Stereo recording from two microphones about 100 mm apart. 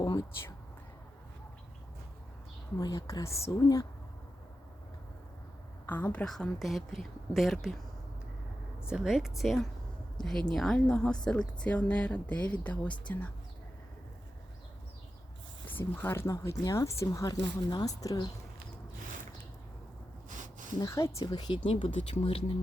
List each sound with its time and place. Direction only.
0.0 s a sound: 45° left (ahead or behind)
2.7 s speech: 35° left (ahead or behind)
5.9 s a woman's voice: 15° left (ahead or behind)
8.9 s a woman's voice: 5° right (ahead or behind); by 13.3 s 15° left (ahead or behind)
15.7 s speech: 20° left (ahead or behind)
17.4 s speech: 45° left (ahead or behind)
20.7 s speech: 30° left (ahead or behind); by 21.7 s 50° left (ahead or behind)
21.8 s speech: 75° left (ahead or behind)